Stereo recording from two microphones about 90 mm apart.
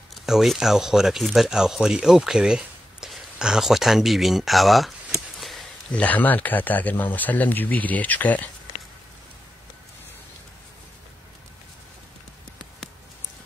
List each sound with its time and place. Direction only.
0.1 s speech: centre (ahead or behind)
5.4 s a sound: centre (ahead or behind)
5.9 s speech: 15° left (ahead or behind)